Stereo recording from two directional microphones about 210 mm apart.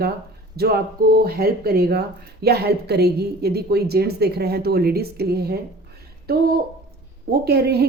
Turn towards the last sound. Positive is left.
turn(degrees=-50)  # may be behind; listen again after turning